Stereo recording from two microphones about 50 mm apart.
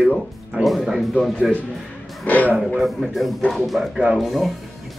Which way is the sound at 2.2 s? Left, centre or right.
Left.